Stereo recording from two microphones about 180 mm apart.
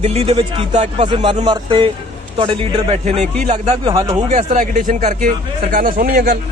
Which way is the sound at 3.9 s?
15° right (ahead or behind).